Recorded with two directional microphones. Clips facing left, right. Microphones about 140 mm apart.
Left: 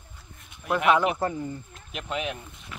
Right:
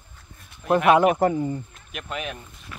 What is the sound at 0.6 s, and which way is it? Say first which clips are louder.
Speech: right 5 dB; 25° right (ahead or behind).